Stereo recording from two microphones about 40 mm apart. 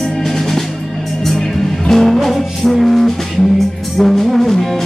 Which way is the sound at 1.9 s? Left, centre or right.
Centre.